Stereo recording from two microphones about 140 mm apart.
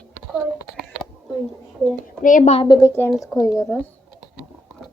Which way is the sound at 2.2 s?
70° left (ahead or behind).